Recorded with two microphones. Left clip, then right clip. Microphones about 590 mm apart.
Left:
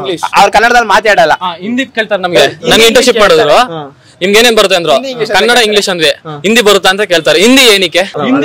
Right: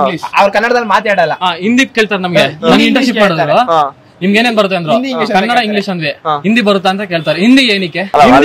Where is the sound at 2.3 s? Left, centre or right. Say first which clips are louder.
Left 3 dB; left.